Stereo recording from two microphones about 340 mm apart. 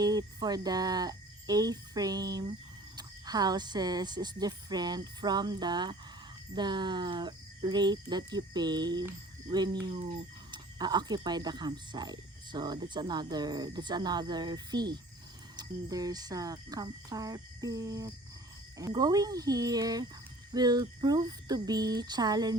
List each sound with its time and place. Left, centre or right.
0.0 s cricket: centre
2.9 s speech: centre